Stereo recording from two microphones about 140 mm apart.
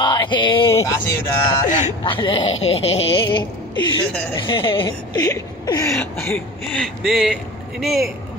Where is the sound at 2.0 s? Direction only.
35° left (ahead or behind).